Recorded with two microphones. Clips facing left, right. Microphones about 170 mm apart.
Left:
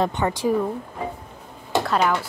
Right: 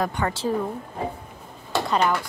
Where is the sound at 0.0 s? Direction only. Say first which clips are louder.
Left 3 dB; 20° left (ahead or behind).